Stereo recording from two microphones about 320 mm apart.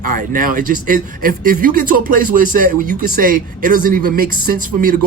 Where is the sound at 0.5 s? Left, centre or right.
Right.